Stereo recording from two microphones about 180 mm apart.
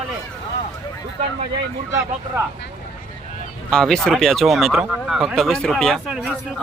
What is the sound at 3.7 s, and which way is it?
Speech, 5° left (ahead or behind).